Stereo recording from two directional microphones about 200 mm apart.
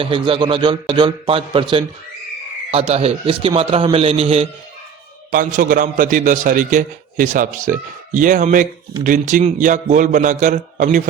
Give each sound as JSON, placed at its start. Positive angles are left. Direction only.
{"t": 0.0, "sound": "a man's voice", "side_deg": -25}
{"t": 5.3, "sound": "a man's voice", "side_deg": -40}